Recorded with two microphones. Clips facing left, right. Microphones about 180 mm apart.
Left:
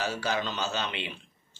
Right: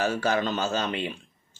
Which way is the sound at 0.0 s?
50° right (ahead or behind).